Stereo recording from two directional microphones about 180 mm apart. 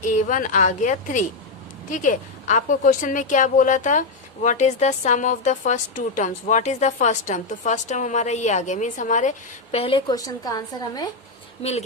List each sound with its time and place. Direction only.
0.0 s a woman's voice: 45° left (ahead or behind)
9.7 s a woman's voice: 30° left (ahead or behind)